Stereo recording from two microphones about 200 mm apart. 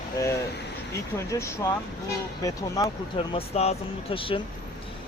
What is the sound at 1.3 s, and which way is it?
Speech, 15° left (ahead or behind).